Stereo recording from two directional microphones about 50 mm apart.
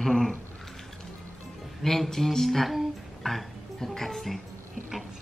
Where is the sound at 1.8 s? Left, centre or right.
Centre.